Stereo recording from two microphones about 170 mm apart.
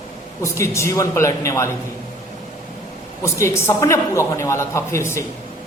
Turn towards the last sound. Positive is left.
turn(degrees=15)  # may be behind; listen again after turning